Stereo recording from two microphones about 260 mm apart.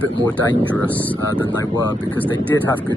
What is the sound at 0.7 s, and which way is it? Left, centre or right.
Speech, centre.